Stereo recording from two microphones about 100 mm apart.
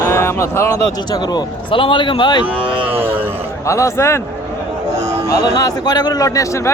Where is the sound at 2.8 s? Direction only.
20° right (ahead or behind).